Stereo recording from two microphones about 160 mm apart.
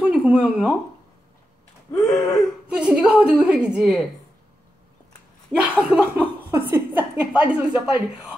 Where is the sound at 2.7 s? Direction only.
5° right (ahead or behind).